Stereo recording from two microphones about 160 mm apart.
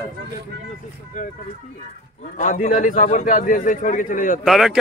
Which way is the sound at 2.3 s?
50° left (ahead or behind).